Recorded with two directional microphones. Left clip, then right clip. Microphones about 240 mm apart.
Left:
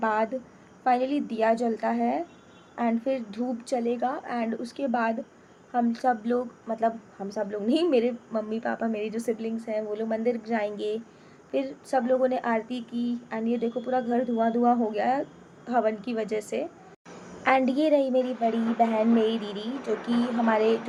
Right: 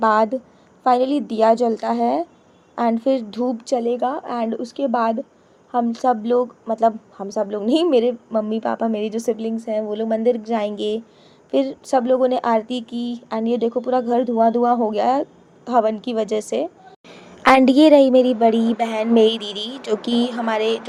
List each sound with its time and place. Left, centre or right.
0.0 s a woman's voice: right
17.4 s a woman's voice: right